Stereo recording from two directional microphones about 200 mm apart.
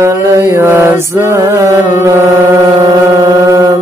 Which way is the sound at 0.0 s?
15° right (ahead or behind).